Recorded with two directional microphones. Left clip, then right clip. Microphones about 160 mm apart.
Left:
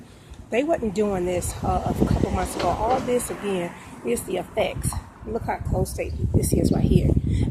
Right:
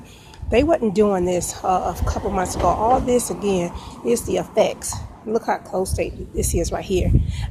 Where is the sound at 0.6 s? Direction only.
30° right (ahead or behind).